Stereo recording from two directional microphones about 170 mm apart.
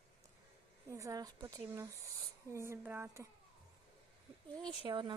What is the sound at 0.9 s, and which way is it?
A woman's voice, 20° right (ahead or behind).